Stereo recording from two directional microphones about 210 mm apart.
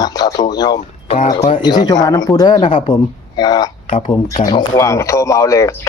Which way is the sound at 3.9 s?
35° left (ahead or behind).